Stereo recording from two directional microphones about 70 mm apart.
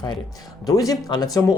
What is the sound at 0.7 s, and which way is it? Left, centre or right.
Speech, left.